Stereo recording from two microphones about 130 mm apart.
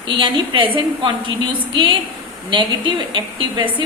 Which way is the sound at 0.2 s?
40° right (ahead or behind).